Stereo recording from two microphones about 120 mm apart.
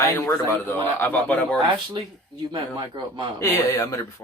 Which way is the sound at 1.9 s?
35° right (ahead or behind).